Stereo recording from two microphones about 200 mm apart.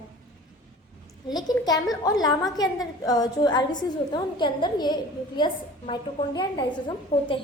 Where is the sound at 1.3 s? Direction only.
20° left (ahead or behind).